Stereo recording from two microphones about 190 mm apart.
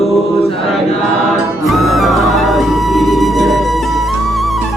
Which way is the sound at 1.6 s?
Centre (ahead or behind).